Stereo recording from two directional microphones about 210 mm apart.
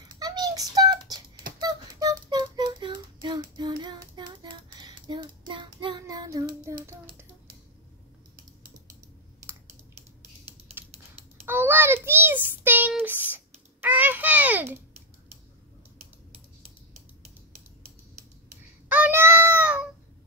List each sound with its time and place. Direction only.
0.2 s a sound: 20° right (ahead or behind)
1.6 s child singing: 20° right (ahead or behind)
10.8 s typing: 10° right (ahead or behind)
11.4 s child singing: 10° right (ahead or behind)
18.9 s child singing: 10° right (ahead or behind)